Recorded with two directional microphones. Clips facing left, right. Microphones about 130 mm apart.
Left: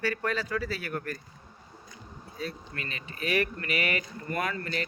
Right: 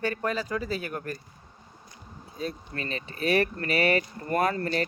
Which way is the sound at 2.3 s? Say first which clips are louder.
Right 3 dB; 30° right (ahead or behind).